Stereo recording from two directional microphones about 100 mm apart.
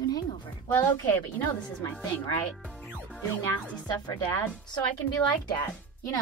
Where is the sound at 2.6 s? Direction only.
10° left (ahead or behind).